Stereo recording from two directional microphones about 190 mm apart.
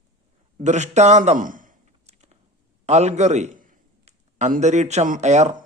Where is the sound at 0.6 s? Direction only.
40° right (ahead or behind).